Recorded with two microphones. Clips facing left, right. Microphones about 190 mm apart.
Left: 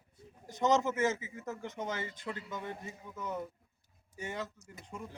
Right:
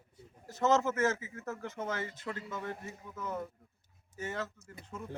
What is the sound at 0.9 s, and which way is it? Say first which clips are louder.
Speech: right 1 dB; 10° left (ahead or behind).